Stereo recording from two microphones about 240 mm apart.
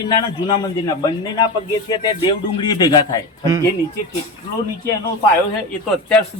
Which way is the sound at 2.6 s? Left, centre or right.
Centre.